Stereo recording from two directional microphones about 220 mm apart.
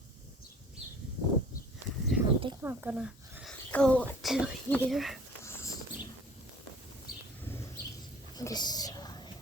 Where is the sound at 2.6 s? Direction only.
10° right (ahead or behind).